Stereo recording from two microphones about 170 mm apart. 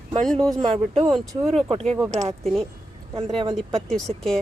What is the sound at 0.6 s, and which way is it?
Speech, 35° right (ahead or behind).